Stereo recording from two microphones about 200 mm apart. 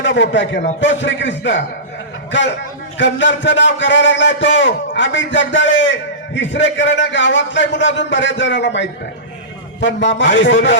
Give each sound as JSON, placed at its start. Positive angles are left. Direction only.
{"t": 0.0, "sound": "a man's voice", "side_deg": 70}
{"t": 3.0, "sound": "a man's voice", "side_deg": 65}